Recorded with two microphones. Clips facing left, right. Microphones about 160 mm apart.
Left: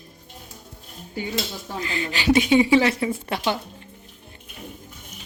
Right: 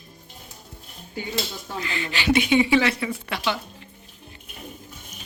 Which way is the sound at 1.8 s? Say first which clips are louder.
Left 1 dB; 40° left (ahead or behind).